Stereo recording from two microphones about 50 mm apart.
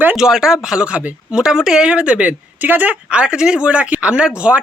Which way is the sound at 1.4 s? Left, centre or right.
Centre.